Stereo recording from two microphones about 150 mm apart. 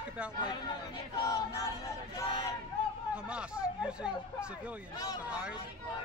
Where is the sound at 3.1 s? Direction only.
5° right (ahead or behind).